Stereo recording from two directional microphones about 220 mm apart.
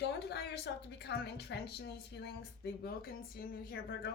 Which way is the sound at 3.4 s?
45° left (ahead or behind).